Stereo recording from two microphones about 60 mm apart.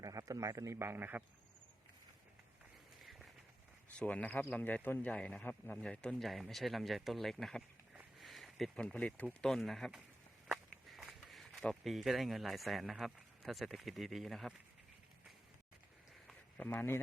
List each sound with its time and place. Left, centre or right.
0.0 s a man's voice: right
3.0 s a sound: centre
3.9 s a man's voice: left
5.5 s a man's voice: left
5.8 s speech: centre
6.2 s speech: centre
8.2 s a sound: centre
8.7 s a man's voice: centre
9.4 s speech: centre
10.8 s a sound: centre
11.6 s speech: centre
16.6 s a man's voice: left